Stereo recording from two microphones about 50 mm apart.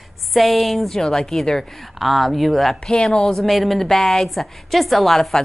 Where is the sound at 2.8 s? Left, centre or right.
Centre.